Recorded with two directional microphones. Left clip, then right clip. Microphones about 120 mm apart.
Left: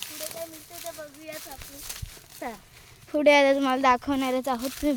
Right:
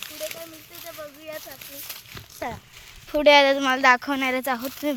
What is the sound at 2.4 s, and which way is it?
Speech, 70° right (ahead or behind).